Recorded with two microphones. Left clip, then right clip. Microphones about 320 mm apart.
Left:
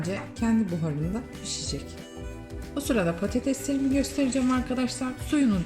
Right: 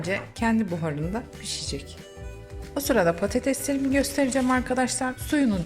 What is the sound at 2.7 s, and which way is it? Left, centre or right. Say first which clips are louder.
A woman's voice: right 5 dB; centre.